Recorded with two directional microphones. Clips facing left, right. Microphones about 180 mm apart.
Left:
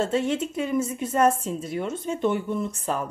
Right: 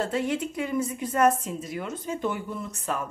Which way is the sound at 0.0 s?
25° left (ahead or behind).